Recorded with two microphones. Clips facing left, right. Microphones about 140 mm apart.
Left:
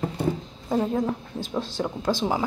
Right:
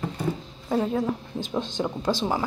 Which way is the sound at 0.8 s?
5° left (ahead or behind).